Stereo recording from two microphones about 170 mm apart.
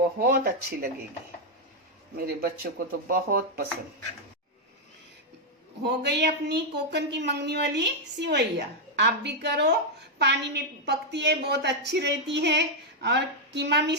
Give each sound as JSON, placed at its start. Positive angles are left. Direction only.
{"t": 0.2, "sound": "speech", "side_deg": -65}
{"t": 2.1, "sound": "speech", "side_deg": -65}
{"t": 5.8, "sound": "a woman's voice", "side_deg": -75}